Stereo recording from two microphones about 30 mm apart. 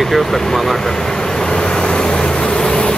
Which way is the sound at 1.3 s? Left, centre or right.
Left.